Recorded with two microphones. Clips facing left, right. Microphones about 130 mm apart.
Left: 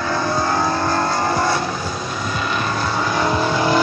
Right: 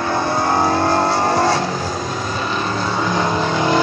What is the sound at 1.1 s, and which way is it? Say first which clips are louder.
Vehicle: right 3 dB; 75° right (ahead or behind).